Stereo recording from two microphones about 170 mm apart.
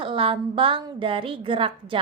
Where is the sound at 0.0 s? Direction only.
30° right (ahead or behind).